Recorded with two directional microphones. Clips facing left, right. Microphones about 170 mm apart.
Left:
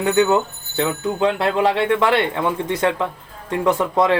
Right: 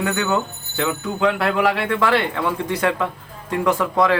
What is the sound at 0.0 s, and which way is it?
Speech, 25° left (ahead or behind).